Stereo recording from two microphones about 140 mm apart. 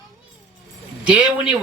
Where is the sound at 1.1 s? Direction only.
5° right (ahead or behind).